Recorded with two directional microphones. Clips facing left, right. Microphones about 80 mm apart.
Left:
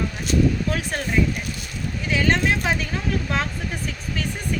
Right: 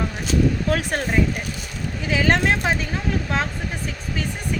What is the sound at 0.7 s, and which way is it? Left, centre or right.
Speech, right.